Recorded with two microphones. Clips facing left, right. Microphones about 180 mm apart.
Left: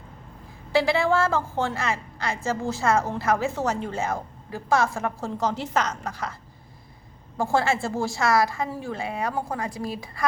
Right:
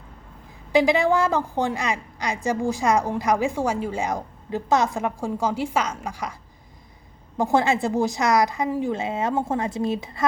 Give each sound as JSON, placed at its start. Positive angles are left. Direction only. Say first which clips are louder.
{"t": 0.7, "sound": "a woman's voice", "louder": "right 3 dB", "side_deg": -15}
{"t": 7.3, "sound": "a woman's voice", "louder": "right 3 dB", "side_deg": -20}